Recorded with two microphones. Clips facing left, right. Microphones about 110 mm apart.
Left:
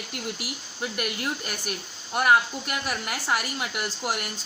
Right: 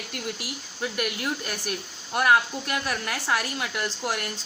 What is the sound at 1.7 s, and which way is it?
Speech, 5° left (ahead or behind).